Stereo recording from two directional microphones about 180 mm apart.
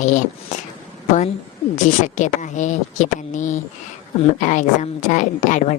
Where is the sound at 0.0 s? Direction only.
45° left (ahead or behind).